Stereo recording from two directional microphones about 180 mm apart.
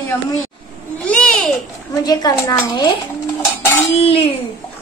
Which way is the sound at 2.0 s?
20° left (ahead or behind).